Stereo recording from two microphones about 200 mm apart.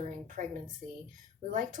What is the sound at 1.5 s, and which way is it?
Speech, 40° right (ahead or behind).